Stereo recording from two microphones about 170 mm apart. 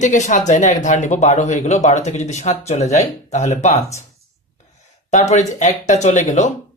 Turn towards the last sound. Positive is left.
turn(degrees=45)  # may be behind; listen again after turning